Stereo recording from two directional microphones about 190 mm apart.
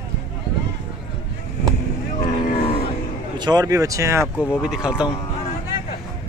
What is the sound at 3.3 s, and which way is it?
Speech, 20° right (ahead or behind).